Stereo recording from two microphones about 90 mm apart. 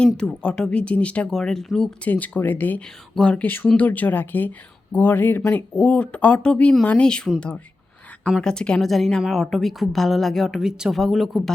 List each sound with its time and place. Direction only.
0.2 s speech: 10° left (ahead or behind)
2.0 s a woman's voice: 20° left (ahead or behind); by 11.5 s centre (ahead or behind)